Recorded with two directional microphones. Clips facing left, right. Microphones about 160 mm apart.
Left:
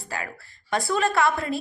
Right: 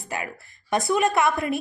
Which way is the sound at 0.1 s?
20° right (ahead or behind).